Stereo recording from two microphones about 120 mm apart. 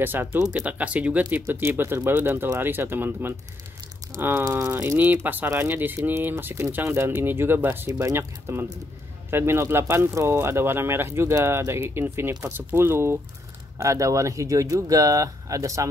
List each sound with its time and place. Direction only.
0.0 s speech: 15° right (ahead or behind)
4.5 s speech: 25° right (ahead or behind)